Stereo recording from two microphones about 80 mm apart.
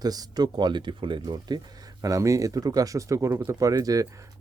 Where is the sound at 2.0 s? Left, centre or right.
Right.